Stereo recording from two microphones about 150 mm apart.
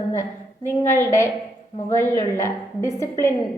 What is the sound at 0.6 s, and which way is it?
A woman's voice, 15° left (ahead or behind).